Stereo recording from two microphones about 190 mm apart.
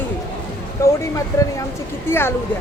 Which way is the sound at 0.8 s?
15° left (ahead or behind).